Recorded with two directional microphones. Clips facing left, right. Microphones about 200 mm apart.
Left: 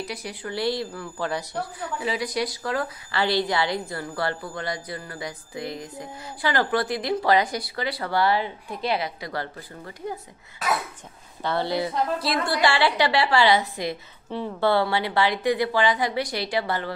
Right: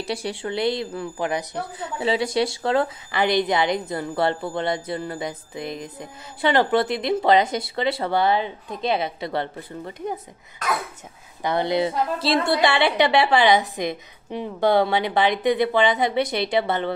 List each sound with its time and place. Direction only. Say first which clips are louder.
0.0 s a woman's voice: right 5 dB; 30° right (ahead or behind)
11.4 s a woman's voice: right 4 dB; 20° right (ahead or behind)